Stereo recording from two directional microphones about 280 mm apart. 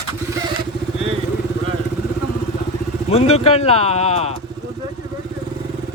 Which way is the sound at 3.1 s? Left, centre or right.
Left.